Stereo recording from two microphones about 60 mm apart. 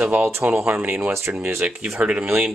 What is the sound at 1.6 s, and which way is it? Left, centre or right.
Speech, right.